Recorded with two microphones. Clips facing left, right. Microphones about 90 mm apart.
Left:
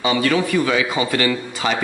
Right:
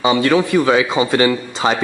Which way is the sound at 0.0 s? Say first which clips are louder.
Right 4 dB; 25° right (ahead or behind).